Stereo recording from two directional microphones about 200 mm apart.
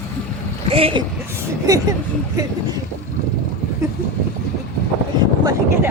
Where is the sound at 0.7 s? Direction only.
30° right (ahead or behind).